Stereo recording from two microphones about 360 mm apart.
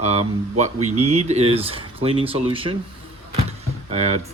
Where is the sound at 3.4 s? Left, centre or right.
Centre.